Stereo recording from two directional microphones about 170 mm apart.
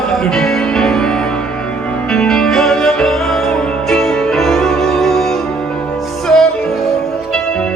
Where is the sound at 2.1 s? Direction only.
5° left (ahead or behind).